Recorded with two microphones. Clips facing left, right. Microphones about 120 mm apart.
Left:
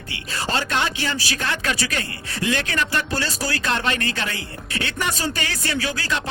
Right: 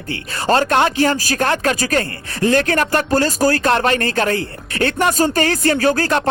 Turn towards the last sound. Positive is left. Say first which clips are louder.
# right 9 dB
turn(degrees=-50)  # may be behind; listen again after turning